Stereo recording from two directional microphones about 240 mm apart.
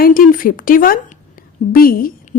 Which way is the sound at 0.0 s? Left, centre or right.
Left.